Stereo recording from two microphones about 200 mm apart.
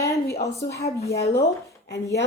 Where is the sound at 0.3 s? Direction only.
50° left (ahead or behind).